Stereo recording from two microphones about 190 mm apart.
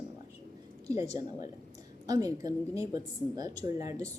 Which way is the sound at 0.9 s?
15° right (ahead or behind).